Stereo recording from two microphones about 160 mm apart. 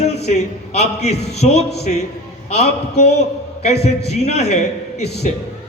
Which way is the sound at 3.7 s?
90° left.